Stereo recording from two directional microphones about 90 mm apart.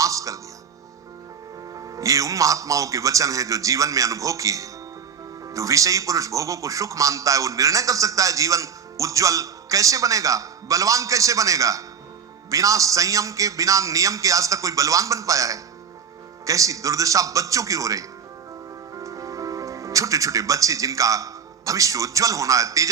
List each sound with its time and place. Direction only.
0.0 s music: 40° right (ahead or behind)
1.7 s speech: 40° right (ahead or behind)